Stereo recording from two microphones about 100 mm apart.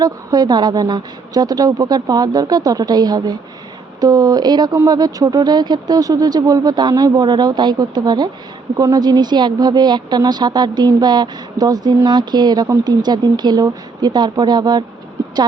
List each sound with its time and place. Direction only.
0.0 s speech: 40° right (ahead or behind)